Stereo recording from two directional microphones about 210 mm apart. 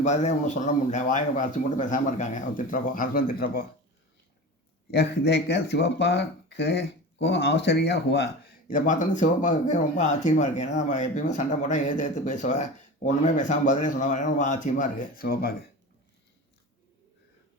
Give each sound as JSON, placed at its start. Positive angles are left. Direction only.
{"t": 0.0, "sound": "speech", "side_deg": 35}
{"t": 4.9, "sound": "speech", "side_deg": 50}